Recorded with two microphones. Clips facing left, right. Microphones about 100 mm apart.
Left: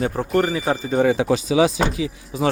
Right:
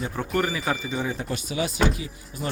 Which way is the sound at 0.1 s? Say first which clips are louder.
Left 5 dB; 40° left (ahead or behind).